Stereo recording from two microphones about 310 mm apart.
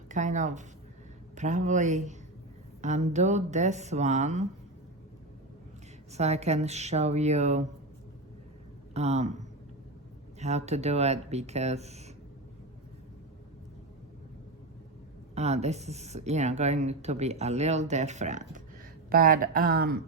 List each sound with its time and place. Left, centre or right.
0.1 s speech: right
6.1 s speech: right
8.9 s a man's voice: right
10.4 s speech: right
15.4 s speech: right